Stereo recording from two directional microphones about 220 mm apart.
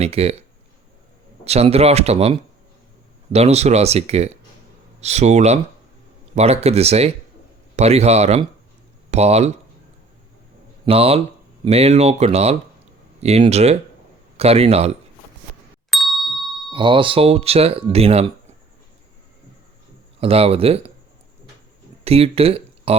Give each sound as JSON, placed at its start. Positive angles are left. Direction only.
{"t": 0.0, "sound": "speech", "side_deg": -30}
{"t": 1.5, "sound": "speech", "side_deg": -30}
{"t": 10.8, "sound": "speech", "side_deg": -25}
{"t": 15.9, "sound": "ding", "side_deg": 0}
{"t": 16.7, "sound": "speech", "side_deg": -20}
{"t": 20.1, "sound": "speech", "side_deg": -25}
{"t": 22.0, "sound": "speech", "side_deg": -25}